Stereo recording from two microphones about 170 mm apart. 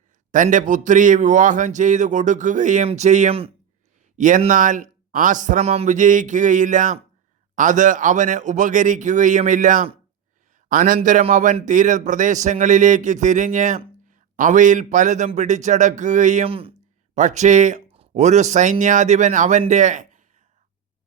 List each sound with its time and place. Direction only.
0.3 s speech: 50° right (ahead or behind)
4.2 s speech: 50° right (ahead or behind); by 16.7 s 35° right (ahead or behind)
17.2 s speech: 45° right (ahead or behind)